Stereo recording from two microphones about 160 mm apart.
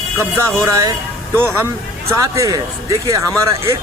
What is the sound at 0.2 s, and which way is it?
A man's voice, 15° right (ahead or behind).